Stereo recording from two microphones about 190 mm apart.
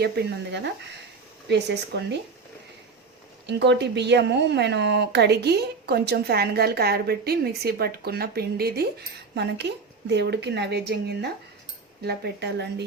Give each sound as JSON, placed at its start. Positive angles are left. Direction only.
{"t": 0.0, "sound": "speech", "side_deg": -60}
{"t": 3.4, "sound": "speech", "side_deg": -65}